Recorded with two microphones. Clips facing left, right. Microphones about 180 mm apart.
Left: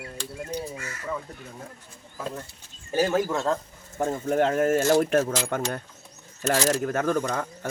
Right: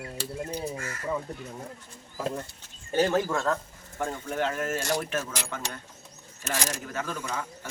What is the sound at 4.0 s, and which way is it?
A man's voice, 40° left (ahead or behind).